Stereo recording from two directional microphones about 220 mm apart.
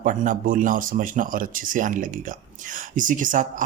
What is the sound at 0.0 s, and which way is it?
Speech, 35° right (ahead or behind).